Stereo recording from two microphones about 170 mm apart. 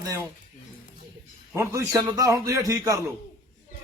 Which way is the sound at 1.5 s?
15° right (ahead or behind).